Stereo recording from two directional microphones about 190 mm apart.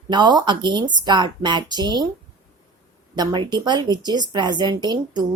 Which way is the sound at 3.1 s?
25° right (ahead or behind).